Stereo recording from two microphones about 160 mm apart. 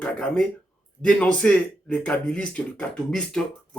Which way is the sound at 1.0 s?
5° left (ahead or behind).